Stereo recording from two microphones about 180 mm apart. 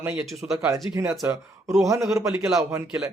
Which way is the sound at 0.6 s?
15° right (ahead or behind).